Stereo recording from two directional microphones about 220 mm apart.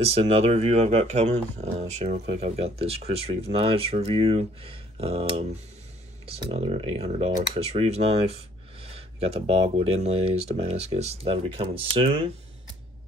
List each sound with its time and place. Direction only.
0.0 s speech: 30° right (ahead or behind)